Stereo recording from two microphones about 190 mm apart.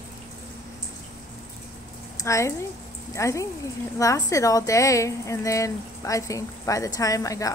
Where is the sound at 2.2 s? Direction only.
15° left (ahead or behind).